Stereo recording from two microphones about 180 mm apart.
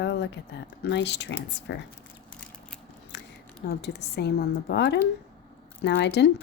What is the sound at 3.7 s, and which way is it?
Speech, 65° left (ahead or behind).